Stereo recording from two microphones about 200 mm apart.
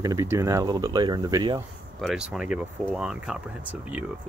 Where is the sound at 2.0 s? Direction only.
Centre (ahead or behind).